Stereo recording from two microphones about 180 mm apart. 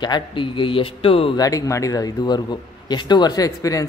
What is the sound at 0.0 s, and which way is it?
A man's voice, 25° left (ahead or behind).